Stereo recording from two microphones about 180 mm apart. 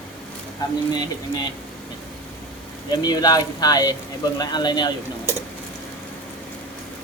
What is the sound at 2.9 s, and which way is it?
Speech, 20° left (ahead or behind).